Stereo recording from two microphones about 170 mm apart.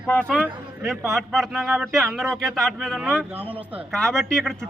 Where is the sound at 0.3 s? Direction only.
5° right (ahead or behind).